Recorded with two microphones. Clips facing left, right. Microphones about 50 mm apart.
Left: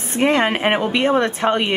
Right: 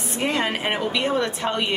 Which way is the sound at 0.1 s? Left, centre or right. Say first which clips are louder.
Left 7 dB; left.